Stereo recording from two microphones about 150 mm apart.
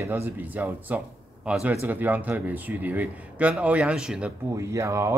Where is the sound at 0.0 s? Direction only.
15° right (ahead or behind).